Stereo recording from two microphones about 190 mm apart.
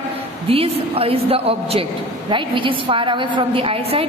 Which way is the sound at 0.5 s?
30° right (ahead or behind).